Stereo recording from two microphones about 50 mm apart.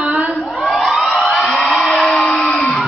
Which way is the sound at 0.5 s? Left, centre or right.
Centre.